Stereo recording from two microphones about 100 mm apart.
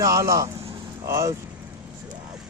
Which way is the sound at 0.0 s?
30° right (ahead or behind).